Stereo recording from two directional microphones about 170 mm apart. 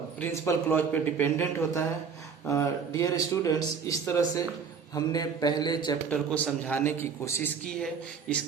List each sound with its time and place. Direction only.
0.2 s speech: 15° left (ahead or behind)
6.1 s speech: 10° left (ahead or behind)